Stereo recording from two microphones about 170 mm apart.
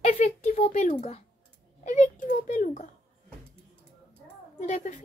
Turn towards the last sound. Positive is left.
turn(degrees=45)  # may be behind; listen again after turning